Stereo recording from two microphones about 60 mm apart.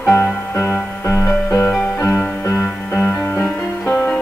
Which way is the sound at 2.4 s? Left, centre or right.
Left.